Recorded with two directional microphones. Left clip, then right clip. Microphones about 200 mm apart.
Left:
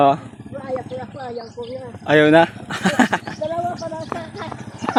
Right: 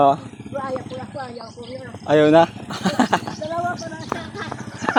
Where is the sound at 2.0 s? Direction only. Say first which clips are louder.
Left 1 dB; 25° left (ahead or behind).